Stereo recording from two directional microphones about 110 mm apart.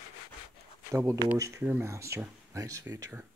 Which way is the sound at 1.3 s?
30° right (ahead or behind).